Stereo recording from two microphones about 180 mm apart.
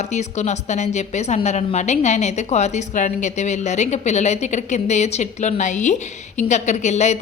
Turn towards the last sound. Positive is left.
turn(degrees=40)  # may be behind; listen again after turning